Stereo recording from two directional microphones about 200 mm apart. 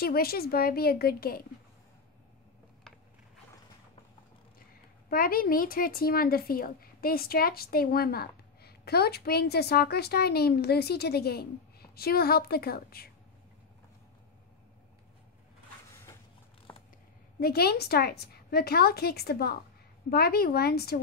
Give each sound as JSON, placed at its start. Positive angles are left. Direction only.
{"t": 0.0, "sound": "speech", "side_deg": 50}
{"t": 5.1, "sound": "speech", "side_deg": 45}
{"t": 16.7, "sound": "a sound", "side_deg": 10}
{"t": 17.4, "sound": "speech", "side_deg": 50}